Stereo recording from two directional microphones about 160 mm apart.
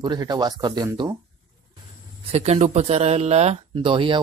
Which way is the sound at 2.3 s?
40° right (ahead or behind).